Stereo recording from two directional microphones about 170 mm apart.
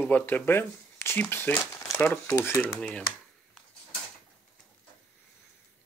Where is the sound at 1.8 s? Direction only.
20° left (ahead or behind).